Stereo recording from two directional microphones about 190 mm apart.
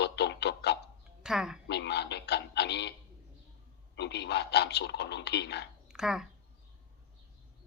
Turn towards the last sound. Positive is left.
turn(degrees=-5)  # may be behind; listen again after turning